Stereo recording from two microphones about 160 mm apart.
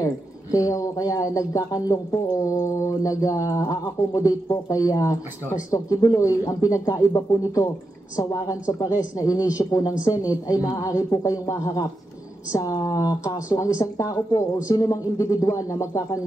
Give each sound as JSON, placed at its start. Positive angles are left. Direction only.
{"t": 0.0, "sound": "speech", "side_deg": 20}